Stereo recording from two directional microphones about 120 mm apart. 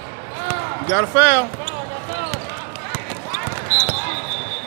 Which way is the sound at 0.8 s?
20° right (ahead or behind).